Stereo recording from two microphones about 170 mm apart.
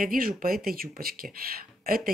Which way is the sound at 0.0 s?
55° right (ahead or behind).